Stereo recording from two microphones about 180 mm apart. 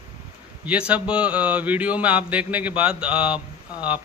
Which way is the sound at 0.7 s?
5° right (ahead or behind).